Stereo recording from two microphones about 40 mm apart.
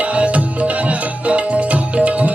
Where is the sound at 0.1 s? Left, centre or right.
Right.